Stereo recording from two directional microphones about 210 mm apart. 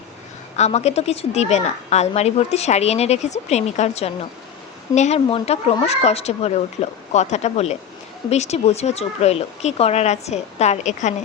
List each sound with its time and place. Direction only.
0.5 s a woman's voice: 30° left (ahead or behind)